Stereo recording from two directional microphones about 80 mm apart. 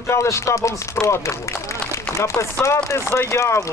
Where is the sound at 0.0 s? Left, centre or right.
Left.